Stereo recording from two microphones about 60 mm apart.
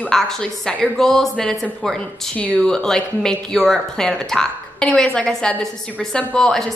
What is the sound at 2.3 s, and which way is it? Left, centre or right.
Speech, left.